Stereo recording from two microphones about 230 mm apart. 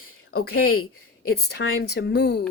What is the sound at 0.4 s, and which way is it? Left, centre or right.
Speech, left.